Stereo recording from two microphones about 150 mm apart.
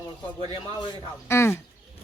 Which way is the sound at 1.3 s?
15° left (ahead or behind).